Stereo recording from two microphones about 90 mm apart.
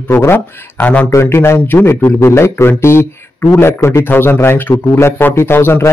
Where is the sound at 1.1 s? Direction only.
30° left (ahead or behind).